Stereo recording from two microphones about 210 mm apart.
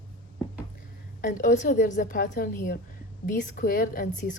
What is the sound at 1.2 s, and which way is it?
A woman's voice, 40° left (ahead or behind).